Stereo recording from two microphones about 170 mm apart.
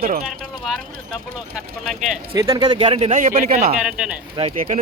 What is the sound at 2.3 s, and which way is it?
Speech, 20° right (ahead or behind).